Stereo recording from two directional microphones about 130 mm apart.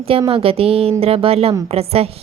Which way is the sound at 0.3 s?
45° right (ahead or behind).